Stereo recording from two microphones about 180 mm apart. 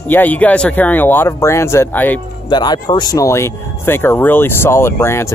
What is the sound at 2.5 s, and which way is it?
Speech, 25° left (ahead or behind).